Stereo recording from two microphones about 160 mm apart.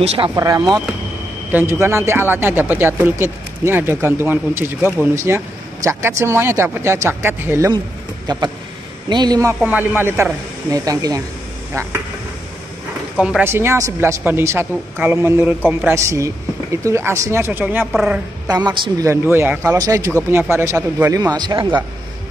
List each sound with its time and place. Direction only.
0.0 s speech: 40° right (ahead or behind)
0.4 s a man's voice: 25° right (ahead or behind)
1.5 s speech: 15° right (ahead or behind)
8.3 s a man's voice: 25° right (ahead or behind)
9.7 s speech: 10° right (ahead or behind)
13.2 s speech: 10° right (ahead or behind)
18.5 s a man's voice: 25° right (ahead or behind)
19.3 s a man's voice: 15° right (ahead or behind)